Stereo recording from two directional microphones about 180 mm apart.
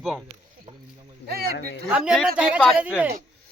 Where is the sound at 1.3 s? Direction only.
60° right (ahead or behind).